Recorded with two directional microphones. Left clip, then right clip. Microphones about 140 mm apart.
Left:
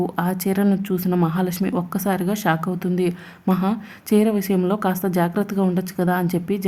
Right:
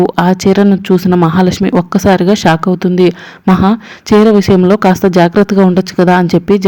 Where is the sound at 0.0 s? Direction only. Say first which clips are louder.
Right 14 dB; 40° right (ahead or behind).